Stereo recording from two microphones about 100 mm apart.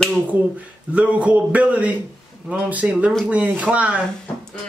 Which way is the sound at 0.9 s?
15° right (ahead or behind).